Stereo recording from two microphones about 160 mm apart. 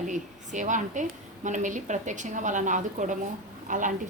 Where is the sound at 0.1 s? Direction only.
50° right (ahead or behind).